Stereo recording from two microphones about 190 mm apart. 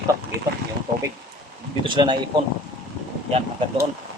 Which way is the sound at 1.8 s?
25° right (ahead or behind).